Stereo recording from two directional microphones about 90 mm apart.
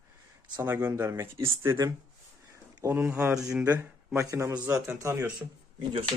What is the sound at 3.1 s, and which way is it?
Speech, 10° right (ahead or behind).